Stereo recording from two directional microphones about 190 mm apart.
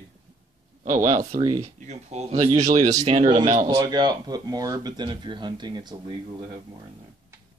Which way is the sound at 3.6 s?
20° right (ahead or behind).